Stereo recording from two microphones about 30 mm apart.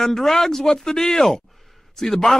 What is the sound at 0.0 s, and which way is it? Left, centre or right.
Speech, centre.